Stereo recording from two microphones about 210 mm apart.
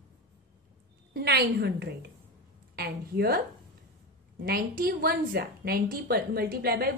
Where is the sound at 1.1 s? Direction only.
50° right (ahead or behind).